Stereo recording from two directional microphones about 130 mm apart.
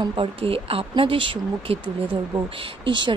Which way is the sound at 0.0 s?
40° right (ahead or behind).